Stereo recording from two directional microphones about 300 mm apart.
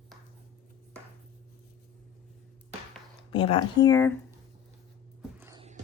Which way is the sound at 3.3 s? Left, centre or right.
Centre.